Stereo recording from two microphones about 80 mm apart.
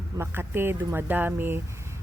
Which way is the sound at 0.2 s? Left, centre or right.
Right.